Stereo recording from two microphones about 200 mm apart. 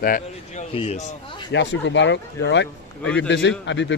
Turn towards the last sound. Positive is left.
turn(degrees=65)  # may be behind; listen again after turning